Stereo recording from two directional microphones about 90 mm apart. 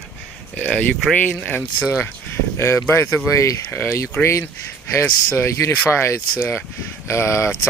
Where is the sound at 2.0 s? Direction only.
30° left (ahead or behind).